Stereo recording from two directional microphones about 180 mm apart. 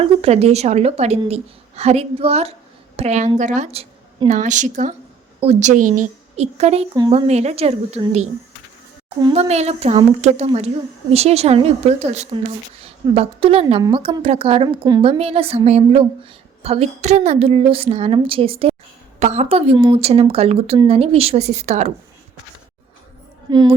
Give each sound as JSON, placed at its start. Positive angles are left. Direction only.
{"t": 0.0, "sound": "a woman's voice", "side_deg": -35}
{"t": 9.2, "sound": "speech", "side_deg": -35}
{"t": 23.5, "sound": "speech", "side_deg": -25}